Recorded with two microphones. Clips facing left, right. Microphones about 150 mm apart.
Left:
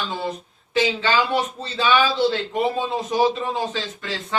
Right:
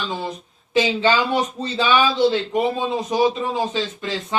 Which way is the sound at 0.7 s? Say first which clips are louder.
Right 2 dB; 20° right (ahead or behind).